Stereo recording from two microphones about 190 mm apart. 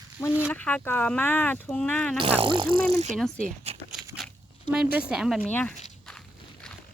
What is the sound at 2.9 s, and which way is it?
Pulleys, 35° right (ahead or behind).